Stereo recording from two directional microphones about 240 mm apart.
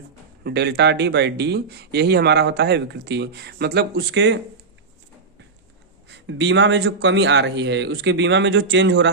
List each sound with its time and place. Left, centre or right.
0.4 s speech: right
6.1 s speech: right